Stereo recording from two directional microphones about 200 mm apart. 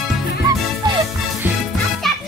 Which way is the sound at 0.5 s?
15° right (ahead or behind).